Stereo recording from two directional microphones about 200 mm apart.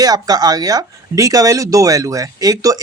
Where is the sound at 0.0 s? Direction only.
20° right (ahead or behind).